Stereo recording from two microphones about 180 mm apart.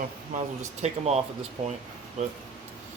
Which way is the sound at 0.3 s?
40° right (ahead or behind).